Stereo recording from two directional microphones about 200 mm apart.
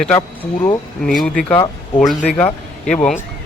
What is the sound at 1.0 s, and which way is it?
Speech, 5° left (ahead or behind).